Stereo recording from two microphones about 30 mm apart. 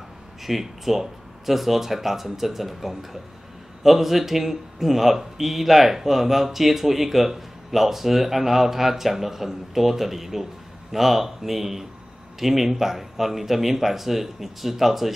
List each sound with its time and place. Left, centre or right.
0.4 s speech: centre